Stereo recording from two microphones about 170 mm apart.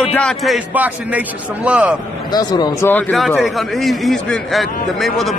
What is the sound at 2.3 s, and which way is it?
Speech, 25° left (ahead or behind).